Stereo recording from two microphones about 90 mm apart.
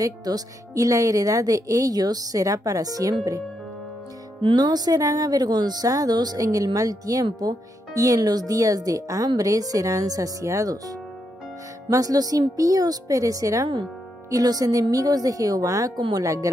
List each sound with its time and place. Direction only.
0.0 s speech: 45° right (ahead or behind)
4.6 s speech: 50° right (ahead or behind)